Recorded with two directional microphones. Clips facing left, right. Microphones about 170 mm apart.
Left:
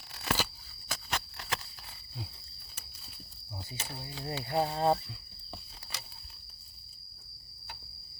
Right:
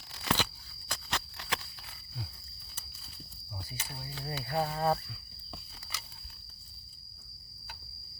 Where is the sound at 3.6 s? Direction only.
25° left (ahead or behind).